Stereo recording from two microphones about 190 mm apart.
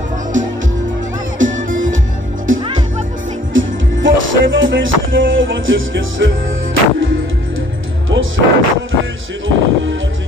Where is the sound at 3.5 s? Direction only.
90° right.